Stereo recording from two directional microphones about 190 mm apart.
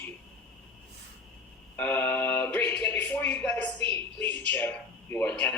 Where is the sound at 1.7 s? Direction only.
10° left (ahead or behind).